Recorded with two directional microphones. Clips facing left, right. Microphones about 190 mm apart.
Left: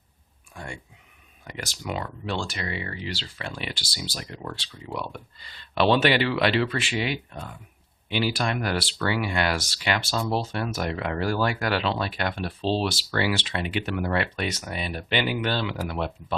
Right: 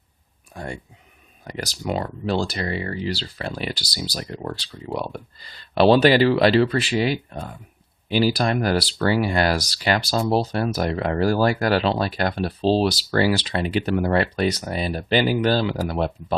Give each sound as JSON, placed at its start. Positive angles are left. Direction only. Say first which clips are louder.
{"t": 0.5, "sound": "speech", "louder": "right 6 dB", "side_deg": -40}